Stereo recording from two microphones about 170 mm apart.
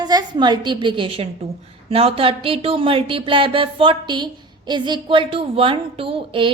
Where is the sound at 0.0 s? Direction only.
25° right (ahead or behind).